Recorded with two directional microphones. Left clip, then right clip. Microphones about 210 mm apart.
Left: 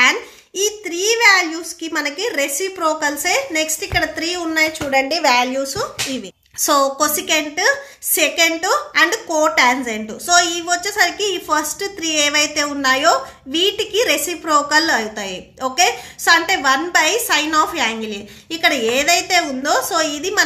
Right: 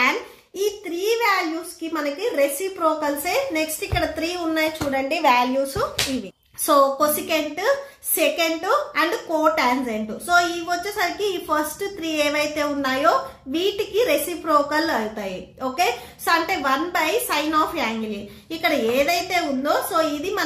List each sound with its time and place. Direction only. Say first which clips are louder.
0.6 s child singing: left 4 dB; 25° left (ahead or behind)
1.8 s a woman's voice: left 4 dB; 30° left (ahead or behind)